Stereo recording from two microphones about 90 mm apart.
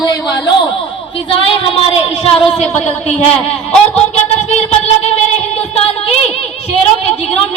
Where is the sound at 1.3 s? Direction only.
90° left.